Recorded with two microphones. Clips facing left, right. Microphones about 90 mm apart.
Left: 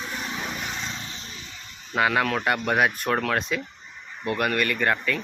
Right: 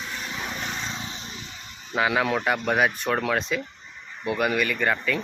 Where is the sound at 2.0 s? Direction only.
Centre (ahead or behind).